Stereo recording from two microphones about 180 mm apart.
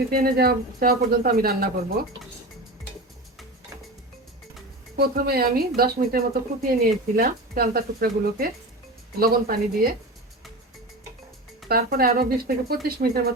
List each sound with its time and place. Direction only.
0.1 s speech: 55° right (ahead or behind)
4.9 s speech: 60° right (ahead or behind)
11.7 s speech: 55° right (ahead or behind)